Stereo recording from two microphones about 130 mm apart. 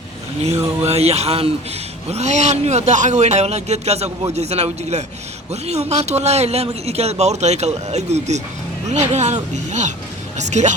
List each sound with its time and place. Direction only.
0.9 s mantra: 55° right (ahead or behind)
2.0 s speech: 60° right (ahead or behind)